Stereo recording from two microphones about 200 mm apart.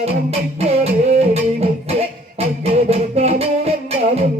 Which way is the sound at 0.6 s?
30° right (ahead or behind).